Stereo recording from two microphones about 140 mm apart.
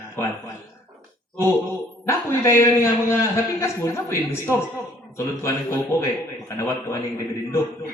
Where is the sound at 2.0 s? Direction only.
20° left (ahead or behind).